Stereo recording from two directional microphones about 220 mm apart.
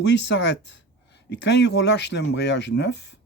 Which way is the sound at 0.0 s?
50° left (ahead or behind).